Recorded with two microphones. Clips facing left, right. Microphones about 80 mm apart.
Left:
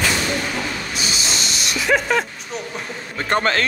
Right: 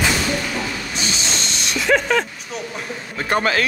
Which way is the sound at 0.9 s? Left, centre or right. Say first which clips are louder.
Even; centre.